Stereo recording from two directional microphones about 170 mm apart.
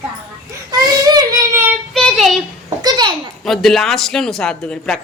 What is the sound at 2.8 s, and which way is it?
Speech, 25° right (ahead or behind).